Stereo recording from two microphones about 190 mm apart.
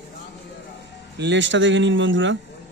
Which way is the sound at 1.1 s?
65° right (ahead or behind).